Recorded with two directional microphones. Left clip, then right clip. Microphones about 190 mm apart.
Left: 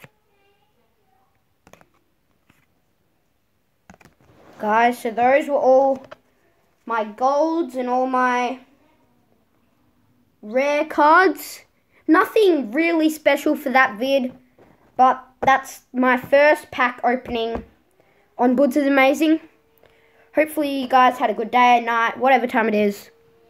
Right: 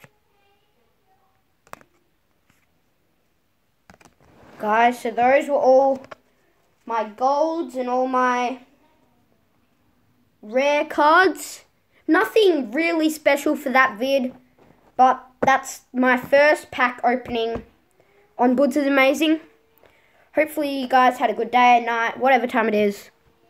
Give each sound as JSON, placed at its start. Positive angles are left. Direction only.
{"t": 3.9, "sound": "a sound", "side_deg": -15}
{"t": 4.6, "sound": "speech", "side_deg": 0}
{"t": 10.4, "sound": "speech", "side_deg": 0}